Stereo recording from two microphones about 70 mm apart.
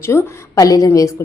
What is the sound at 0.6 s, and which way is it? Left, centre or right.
Speech, left.